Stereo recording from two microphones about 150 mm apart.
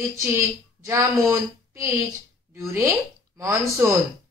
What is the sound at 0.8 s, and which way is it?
A woman's voice, 20° right (ahead or behind).